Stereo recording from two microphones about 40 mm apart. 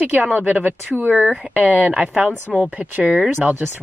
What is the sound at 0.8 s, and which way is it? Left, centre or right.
Speech, right.